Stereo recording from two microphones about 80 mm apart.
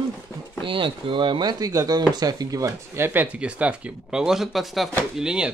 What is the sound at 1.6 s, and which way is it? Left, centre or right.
Speech, right.